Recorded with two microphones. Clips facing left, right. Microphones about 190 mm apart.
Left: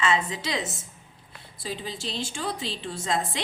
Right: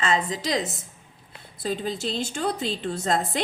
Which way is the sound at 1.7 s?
45° right (ahead or behind).